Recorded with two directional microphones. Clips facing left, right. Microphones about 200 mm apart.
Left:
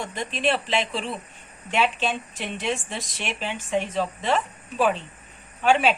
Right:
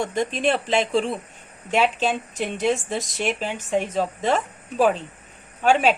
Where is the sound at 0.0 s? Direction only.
45° right (ahead or behind).